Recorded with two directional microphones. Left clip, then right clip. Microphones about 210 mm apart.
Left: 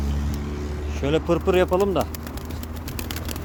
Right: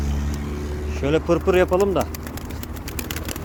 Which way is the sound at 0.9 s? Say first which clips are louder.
Right 2 dB; centre (ahead or behind).